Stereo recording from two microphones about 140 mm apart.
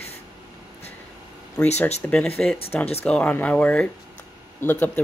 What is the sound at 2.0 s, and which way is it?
Speech, 5° left (ahead or behind).